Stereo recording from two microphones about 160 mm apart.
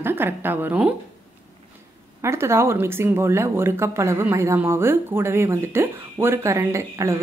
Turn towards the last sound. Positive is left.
turn(degrees=-15)  # may be behind; listen again after turning